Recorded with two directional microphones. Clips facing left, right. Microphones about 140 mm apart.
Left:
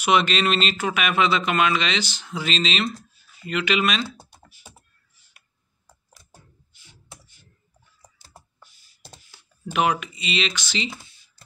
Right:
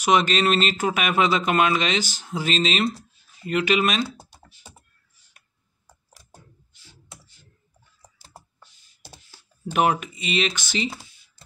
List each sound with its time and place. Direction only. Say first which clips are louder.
0.0 s speech: right 1 dB; 40° right (ahead or behind)
9.7 s speech: right 1 dB; 40° right (ahead or behind)